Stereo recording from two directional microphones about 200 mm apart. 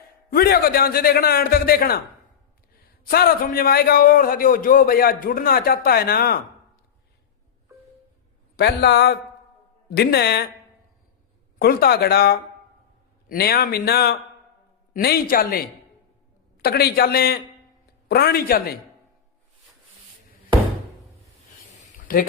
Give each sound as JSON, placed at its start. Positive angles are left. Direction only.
{"t": 0.3, "sound": "a man's voice", "side_deg": 50}
{"t": 8.5, "sound": "a man's voice", "side_deg": 55}
{"t": 11.6, "sound": "a man's voice", "side_deg": 50}
{"t": 16.6, "sound": "a man's voice", "side_deg": 50}
{"t": 21.8, "sound": "a sound", "side_deg": 45}